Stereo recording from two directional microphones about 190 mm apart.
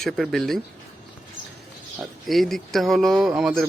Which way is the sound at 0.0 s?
Centre (ahead or behind).